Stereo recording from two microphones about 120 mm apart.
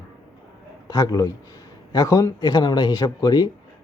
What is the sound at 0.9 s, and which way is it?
A man's voice, 30° left (ahead or behind).